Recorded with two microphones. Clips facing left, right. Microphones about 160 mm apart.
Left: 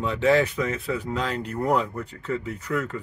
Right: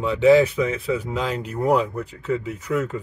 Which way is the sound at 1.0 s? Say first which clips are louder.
Right 2 dB; 15° right (ahead or behind).